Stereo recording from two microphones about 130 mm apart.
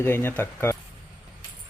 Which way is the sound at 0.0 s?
15° left (ahead or behind).